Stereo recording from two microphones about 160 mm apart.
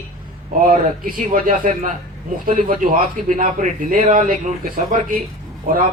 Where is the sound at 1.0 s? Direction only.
55° right (ahead or behind).